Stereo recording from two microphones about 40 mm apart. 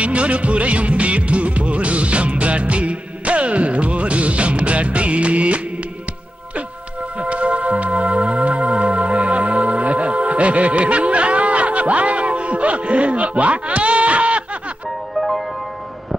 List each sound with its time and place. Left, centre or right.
0.0 s music: right
7.2 s music: right
15.1 s music: centre